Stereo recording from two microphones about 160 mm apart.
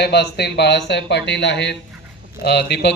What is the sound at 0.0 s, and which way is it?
Speech, 90° left.